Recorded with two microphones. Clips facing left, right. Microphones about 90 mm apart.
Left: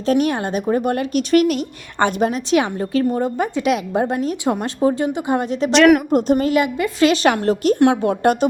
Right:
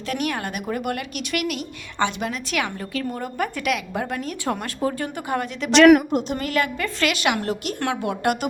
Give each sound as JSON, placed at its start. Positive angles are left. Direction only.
{"t": 0.1, "sound": "a woman's voice", "side_deg": 30}
{"t": 5.7, "sound": "a woman's voice", "side_deg": 0}
{"t": 6.1, "sound": "speech", "side_deg": 40}
{"t": 6.3, "sound": "speech", "side_deg": 20}
{"t": 7.1, "sound": "a woman's voice", "side_deg": 35}